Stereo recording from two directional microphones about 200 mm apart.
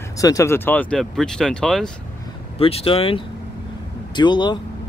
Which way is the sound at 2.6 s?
30° left (ahead or behind).